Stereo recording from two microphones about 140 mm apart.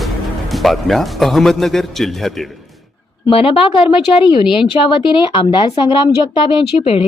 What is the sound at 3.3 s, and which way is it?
Speech, 40° left (ahead or behind).